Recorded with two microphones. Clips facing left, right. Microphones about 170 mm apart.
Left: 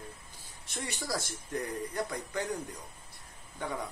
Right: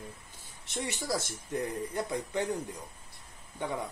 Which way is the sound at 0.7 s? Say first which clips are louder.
Right 3 dB; 20° right (ahead or behind).